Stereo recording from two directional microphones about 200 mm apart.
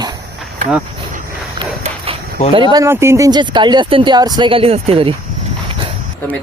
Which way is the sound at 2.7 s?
15° right (ahead or behind).